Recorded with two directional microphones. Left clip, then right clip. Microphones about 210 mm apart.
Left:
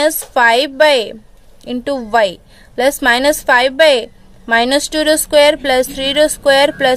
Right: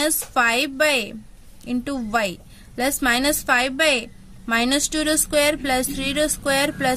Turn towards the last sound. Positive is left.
turn(degrees=-10)  # may be behind; listen again after turning